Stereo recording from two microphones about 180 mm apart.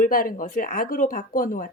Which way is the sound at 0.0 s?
50° left (ahead or behind).